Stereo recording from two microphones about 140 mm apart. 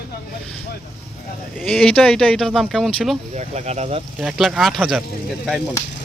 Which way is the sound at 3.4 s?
55° right (ahead or behind).